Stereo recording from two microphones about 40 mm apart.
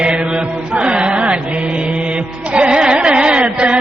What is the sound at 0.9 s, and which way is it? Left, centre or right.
Chant, right.